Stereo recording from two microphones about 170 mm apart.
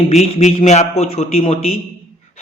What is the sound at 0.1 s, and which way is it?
A man's voice, 40° left (ahead or behind).